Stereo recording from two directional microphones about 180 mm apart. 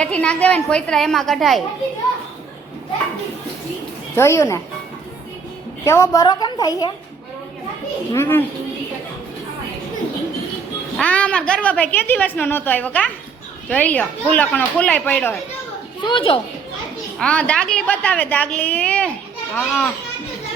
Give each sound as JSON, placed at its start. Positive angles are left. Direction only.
{"t": 0.0, "sound": "a woman's voice", "side_deg": 5}
{"t": 4.1, "sound": "a woman's voice", "side_deg": 15}
{"t": 5.8, "sound": "a woman's voice", "side_deg": 15}
{"t": 8.1, "sound": "a woman's voice", "side_deg": 15}
{"t": 10.9, "sound": "a woman's voice", "side_deg": 10}
{"t": 16.0, "sound": "a woman's voice", "side_deg": 30}
{"t": 17.2, "sound": "a woman's voice", "side_deg": 5}